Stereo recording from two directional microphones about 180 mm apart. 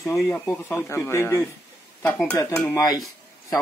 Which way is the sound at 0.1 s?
5° left (ahead or behind).